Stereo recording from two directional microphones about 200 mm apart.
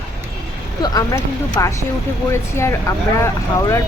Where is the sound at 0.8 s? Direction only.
20° left (ahead or behind).